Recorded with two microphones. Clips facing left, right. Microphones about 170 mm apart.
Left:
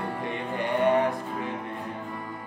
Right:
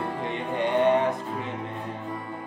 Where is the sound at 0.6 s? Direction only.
20° right (ahead or behind).